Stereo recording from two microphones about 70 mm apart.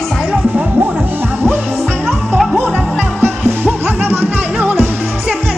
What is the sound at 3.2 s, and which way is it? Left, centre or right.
Music, right.